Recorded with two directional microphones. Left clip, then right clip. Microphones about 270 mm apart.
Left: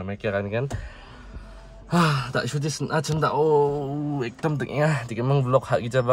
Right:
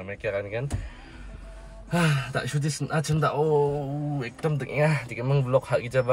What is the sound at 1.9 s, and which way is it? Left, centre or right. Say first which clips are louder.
Speech: left 4 dB; centre.